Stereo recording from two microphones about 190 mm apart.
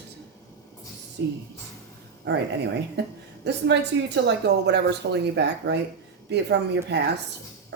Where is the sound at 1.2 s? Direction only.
65° right (ahead or behind).